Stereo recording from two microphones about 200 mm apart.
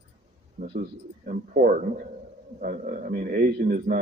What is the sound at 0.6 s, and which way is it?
Speech, 30° right (ahead or behind).